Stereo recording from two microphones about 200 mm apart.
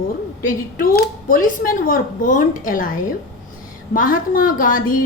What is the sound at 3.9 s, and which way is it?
A woman's voice, 45° left (ahead or behind).